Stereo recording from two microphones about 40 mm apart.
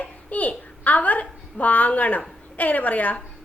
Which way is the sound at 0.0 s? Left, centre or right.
Left.